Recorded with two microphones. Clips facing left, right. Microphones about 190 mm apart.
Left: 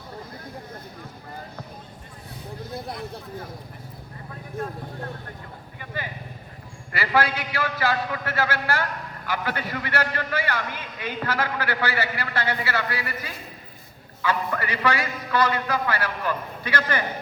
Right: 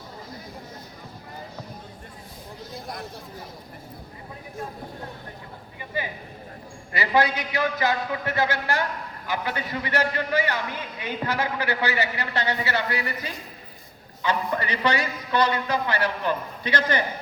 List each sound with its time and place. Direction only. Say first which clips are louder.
6.9 s a man's voice: right 1 dB; 20° right (ahead or behind)